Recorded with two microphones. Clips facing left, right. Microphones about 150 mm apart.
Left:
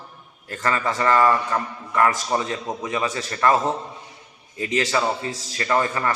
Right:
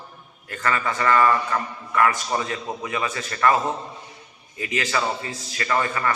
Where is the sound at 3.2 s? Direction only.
30° left (ahead or behind).